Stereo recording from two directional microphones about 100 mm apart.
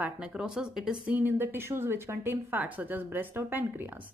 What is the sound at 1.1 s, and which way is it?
Speech, 20° right (ahead or behind).